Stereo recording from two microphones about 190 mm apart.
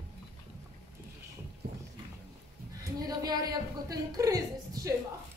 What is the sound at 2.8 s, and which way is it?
Speech, 20° right (ahead or behind).